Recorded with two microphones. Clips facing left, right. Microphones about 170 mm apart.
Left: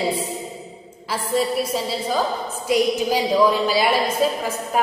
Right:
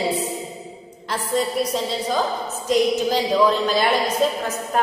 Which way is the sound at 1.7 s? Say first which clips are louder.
Even; 5° left (ahead or behind).